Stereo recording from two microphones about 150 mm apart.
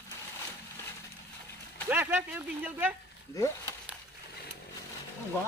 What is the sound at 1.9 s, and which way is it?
Speech, 15° right (ahead or behind).